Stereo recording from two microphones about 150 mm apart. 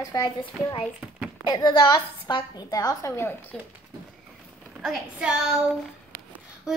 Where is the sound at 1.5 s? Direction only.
30° left (ahead or behind).